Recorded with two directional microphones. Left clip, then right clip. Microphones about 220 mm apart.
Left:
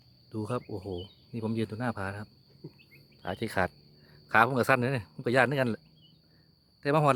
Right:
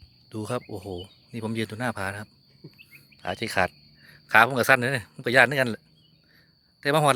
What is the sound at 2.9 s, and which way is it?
Speech, centre (ahead or behind).